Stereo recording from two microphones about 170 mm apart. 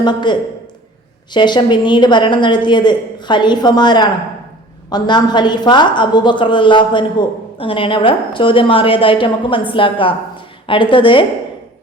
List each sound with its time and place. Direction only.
0.0 s a woman's voice: 25° left (ahead or behind)